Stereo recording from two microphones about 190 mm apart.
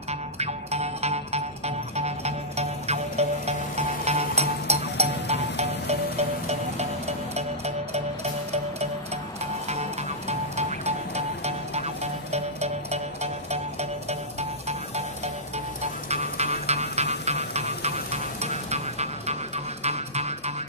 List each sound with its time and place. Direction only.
0.4 s music: 35° right (ahead or behind)